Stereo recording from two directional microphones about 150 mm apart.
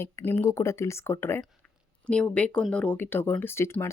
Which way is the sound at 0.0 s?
15° left (ahead or behind).